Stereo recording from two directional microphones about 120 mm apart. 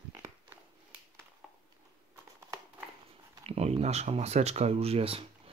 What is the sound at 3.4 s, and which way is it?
Speech, 60° right (ahead or behind).